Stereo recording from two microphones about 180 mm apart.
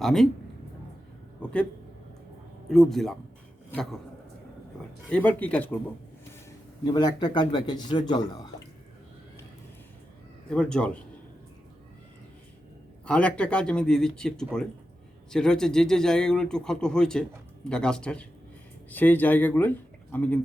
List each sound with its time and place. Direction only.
0.0 s speech: centre (ahead or behind)
1.4 s speech: 5° left (ahead or behind)
2.6 s speech: centre (ahead or behind)
5.0 s speech: 5° left (ahead or behind)
6.8 s speech: 20° left (ahead or behind)
10.5 s speech: 5° left (ahead or behind)
13.1 s speech: 5° left (ahead or behind)